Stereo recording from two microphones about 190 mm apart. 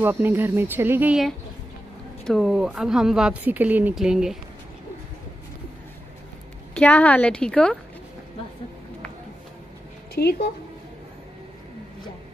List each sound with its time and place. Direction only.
0.0 s speech: 10° right (ahead or behind)
6.7 s a woman's voice: 10° left (ahead or behind)
10.2 s speech: 55° left (ahead or behind)